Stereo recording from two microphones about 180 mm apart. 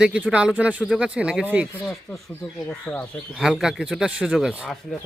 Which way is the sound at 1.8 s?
10° left (ahead or behind).